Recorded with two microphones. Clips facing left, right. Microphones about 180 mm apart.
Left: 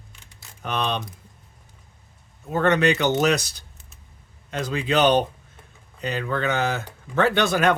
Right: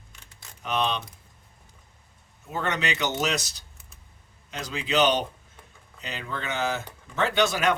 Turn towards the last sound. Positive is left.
turn(degrees=60)  # may be behind; listen again after turning